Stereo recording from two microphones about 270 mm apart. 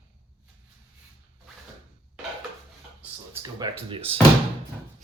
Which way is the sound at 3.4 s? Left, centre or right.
Centre.